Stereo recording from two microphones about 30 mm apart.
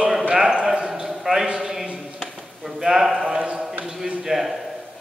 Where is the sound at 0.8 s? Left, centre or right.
Centre.